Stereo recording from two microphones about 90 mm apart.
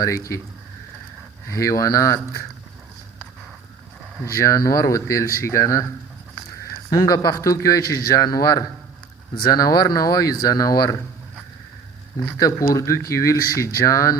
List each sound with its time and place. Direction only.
0.0 s speech: 35° left (ahead or behind)
1.5 s speech: 35° left (ahead or behind)
4.2 s speech: 35° left (ahead or behind)
6.9 s a man's voice: 45° left (ahead or behind)
12.4 s speech: 40° left (ahead or behind)